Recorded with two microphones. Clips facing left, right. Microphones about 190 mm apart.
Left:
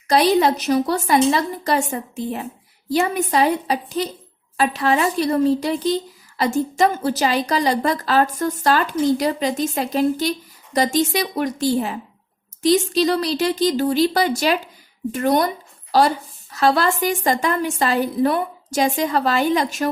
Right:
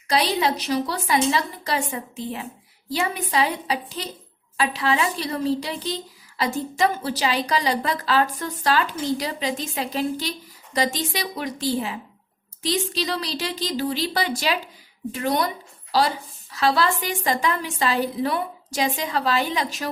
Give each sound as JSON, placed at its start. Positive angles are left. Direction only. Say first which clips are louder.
{"t": 0.1, "sound": "a woman's voice", "louder": "left 6 dB", "side_deg": 45}